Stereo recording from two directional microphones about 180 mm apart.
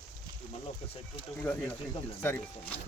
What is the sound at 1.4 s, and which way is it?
Speech, 10° left (ahead or behind).